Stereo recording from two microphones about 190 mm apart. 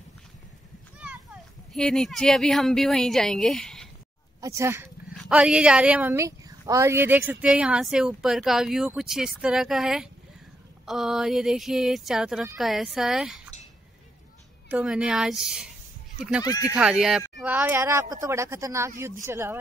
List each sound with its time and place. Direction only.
0.9 s a sound: 5° right (ahead or behind)
1.7 s a woman's voice: 5° left (ahead or behind)
4.4 s speech: 15° right (ahead or behind)
5.1 s a woman's voice: centre (ahead or behind)
14.7 s a woman's voice: 5° right (ahead or behind)
16.4 s speech: 20° left (ahead or behind)
16.7 s a woman's voice: 5° right (ahead or behind)